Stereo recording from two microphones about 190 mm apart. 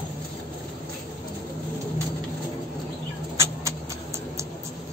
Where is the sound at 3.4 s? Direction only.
15° right (ahead or behind).